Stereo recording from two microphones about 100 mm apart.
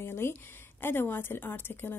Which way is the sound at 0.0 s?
25° left (ahead or behind).